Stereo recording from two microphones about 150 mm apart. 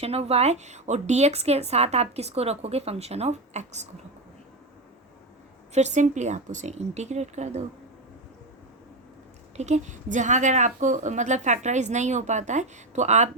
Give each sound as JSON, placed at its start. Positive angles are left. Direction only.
{"t": 0.0, "sound": "speech", "side_deg": -45}
{"t": 5.7, "sound": "speech", "side_deg": -50}
{"t": 9.6, "sound": "speech", "side_deg": -50}